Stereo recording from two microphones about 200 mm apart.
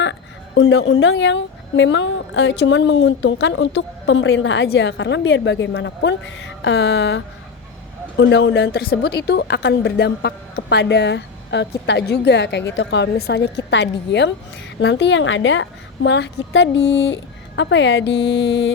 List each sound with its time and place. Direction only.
0.0 s a woman's voice: 65° left (ahead or behind)
8.2 s a woman's voice: 65° left (ahead or behind)